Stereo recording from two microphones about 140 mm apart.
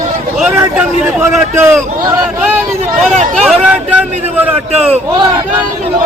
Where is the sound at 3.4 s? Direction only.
5° right (ahead or behind).